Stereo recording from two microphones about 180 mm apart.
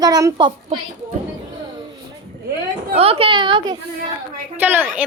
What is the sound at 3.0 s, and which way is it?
Speech, 35° right (ahead or behind).